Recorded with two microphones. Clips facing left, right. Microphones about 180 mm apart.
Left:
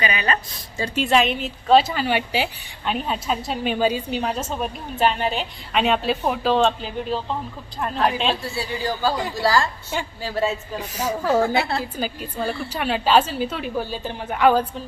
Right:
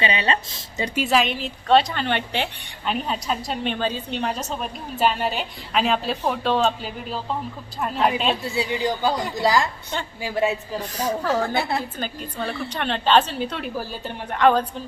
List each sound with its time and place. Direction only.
0.0 s speech: 25° right (ahead or behind)
0.9 s a woman's voice: centre (ahead or behind)
8.4 s a woman's voice: 20° right (ahead or behind)
10.8 s a woman's voice: 10° left (ahead or behind)